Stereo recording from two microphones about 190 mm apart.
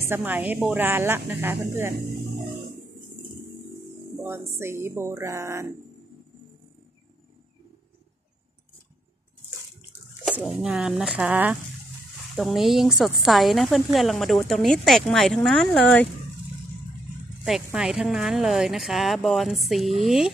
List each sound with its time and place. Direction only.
0.1 s speech: 10° right (ahead or behind)
4.2 s speech: 15° right (ahead or behind)
10.4 s speech: 5° right (ahead or behind)
17.7 s speech: 5° right (ahead or behind)